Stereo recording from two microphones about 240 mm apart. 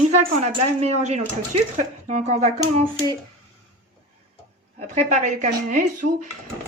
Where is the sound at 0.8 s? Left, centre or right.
Right.